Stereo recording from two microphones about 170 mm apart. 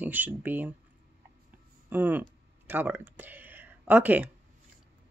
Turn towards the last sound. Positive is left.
turn(degrees=-10)  # may be behind; listen again after turning